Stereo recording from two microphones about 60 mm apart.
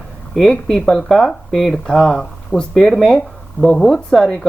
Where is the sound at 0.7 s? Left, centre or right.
Centre.